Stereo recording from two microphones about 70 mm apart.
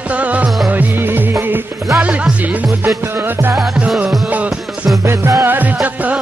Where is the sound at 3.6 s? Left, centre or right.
Centre.